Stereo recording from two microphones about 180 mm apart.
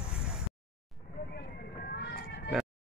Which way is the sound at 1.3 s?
65° left (ahead or behind).